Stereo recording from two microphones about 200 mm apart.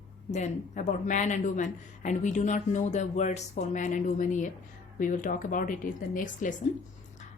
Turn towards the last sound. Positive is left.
turn(degrees=40)  # may be behind; listen again after turning